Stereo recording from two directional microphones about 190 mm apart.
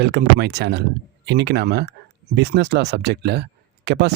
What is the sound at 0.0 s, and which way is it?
Speech, 60° right (ahead or behind).